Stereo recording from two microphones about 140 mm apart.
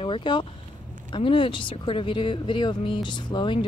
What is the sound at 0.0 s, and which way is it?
Speech, 35° left (ahead or behind).